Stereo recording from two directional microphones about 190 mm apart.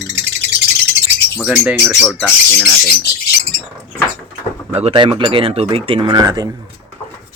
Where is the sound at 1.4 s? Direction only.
5° right (ahead or behind).